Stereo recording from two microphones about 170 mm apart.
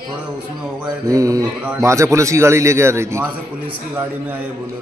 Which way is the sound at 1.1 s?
20° right (ahead or behind).